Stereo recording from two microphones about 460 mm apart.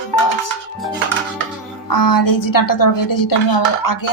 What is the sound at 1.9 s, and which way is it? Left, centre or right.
Dishes, left.